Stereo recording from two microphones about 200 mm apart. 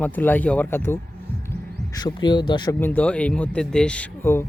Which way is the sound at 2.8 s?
10° left (ahead or behind).